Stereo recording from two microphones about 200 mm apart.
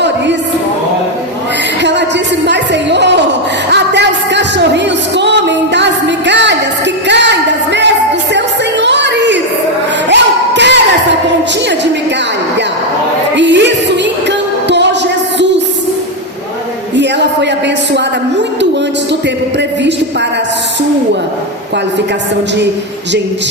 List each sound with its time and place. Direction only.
1.8 s music: 60° right (ahead or behind)
13.3 s music: 60° right (ahead or behind)
16.9 s a sound: 60° right (ahead or behind)